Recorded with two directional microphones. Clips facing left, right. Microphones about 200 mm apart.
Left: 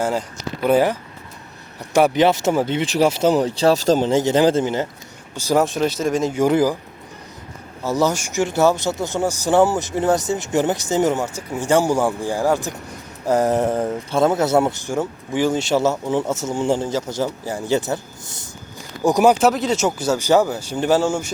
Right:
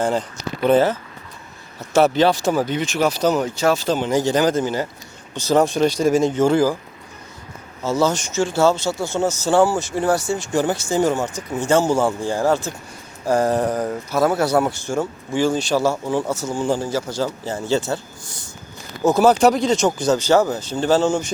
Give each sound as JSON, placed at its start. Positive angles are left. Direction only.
{"t": 0.0, "sound": "speech", "side_deg": 5}
{"t": 4.1, "sound": "speech", "side_deg": 25}
{"t": 5.3, "sound": "speech", "side_deg": 10}
{"t": 6.3, "sound": "speech", "side_deg": 15}
{"t": 7.9, "sound": "speech", "side_deg": 15}
{"t": 19.4, "sound": "speech", "side_deg": 0}